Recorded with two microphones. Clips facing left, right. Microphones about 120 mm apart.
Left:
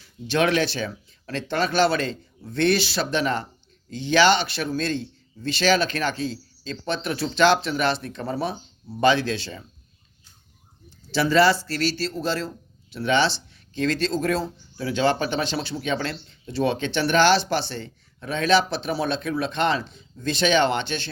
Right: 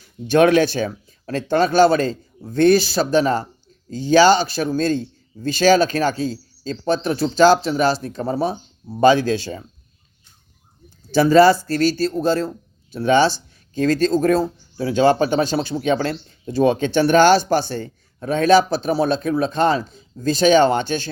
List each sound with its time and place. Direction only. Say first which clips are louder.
0.3 s a man's voice: right 7 dB; 45° right (ahead or behind)
10.8 s speech: right 7 dB; 45° right (ahead or behind)